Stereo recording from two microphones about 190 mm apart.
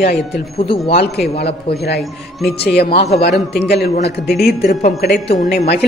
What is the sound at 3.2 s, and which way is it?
A man's voice, 55° left (ahead or behind).